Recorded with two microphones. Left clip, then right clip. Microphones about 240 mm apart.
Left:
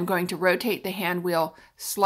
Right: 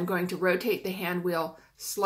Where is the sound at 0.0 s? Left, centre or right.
Left.